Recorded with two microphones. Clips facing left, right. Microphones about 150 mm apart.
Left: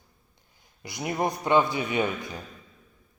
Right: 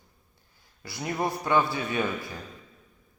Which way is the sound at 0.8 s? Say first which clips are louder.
Left 2 dB; 20° left (ahead or behind).